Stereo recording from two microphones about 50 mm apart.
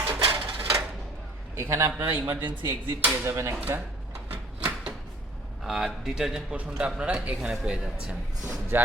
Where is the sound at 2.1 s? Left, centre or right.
Right.